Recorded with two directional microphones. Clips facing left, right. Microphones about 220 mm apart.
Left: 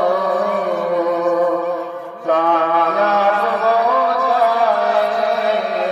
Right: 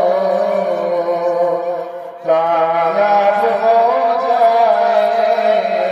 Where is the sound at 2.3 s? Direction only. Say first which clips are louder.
Right 2 dB; 15° right (ahead or behind).